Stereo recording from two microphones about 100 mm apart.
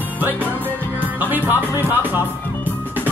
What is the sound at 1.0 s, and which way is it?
Music, 20° right (ahead or behind).